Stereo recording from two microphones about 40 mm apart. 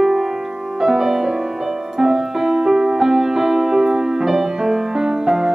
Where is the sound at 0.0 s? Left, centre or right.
Centre.